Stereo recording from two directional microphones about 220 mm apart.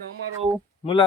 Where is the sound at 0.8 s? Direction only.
25° left (ahead or behind).